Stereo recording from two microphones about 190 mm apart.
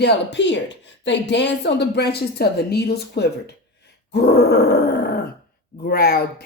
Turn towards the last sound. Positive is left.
turn(degrees=55)  # may be behind; listen again after turning